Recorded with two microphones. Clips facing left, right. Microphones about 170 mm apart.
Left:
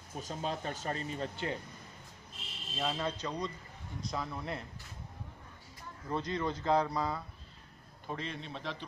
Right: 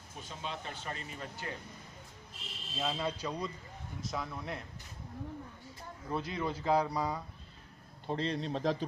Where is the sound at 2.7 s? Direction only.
5° right (ahead or behind).